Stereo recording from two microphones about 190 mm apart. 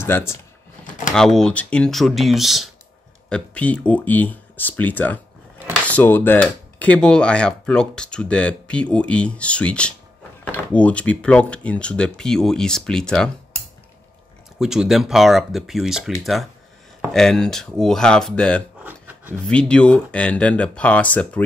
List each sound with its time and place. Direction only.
0.0 s speech: 15° left (ahead or behind)
14.6 s speech: 5° right (ahead or behind)
18.8 s a sound: 10° right (ahead or behind)
19.4 s speech: 5° left (ahead or behind)